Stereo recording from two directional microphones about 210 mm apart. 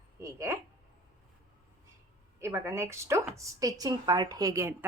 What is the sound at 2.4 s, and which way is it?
A woman's voice, 15° right (ahead or behind).